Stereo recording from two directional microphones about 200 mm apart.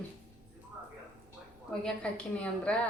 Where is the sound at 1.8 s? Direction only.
5° left (ahead or behind).